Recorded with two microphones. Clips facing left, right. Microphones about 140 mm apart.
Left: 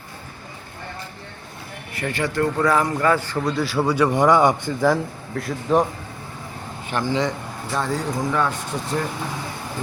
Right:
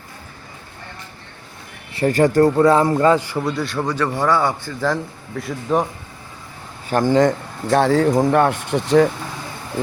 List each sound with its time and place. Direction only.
2.0 s speech: 40° right (ahead or behind)
2.6 s speech: 25° right (ahead or behind)
3.4 s speech: centre (ahead or behind); by 4.9 s 15° left (ahead or behind)
5.3 s speech: centre (ahead or behind)
7.1 s speech: 50° right (ahead or behind)
7.8 s speech: 70° right (ahead or behind)